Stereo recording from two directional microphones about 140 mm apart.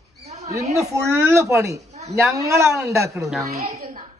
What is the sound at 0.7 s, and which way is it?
Speech, 20° right (ahead or behind).